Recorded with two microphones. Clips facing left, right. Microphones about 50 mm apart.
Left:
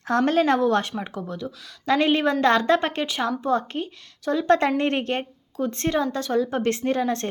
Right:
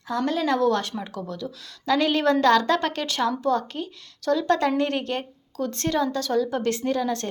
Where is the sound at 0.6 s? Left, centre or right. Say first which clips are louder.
Left 1 dB; left.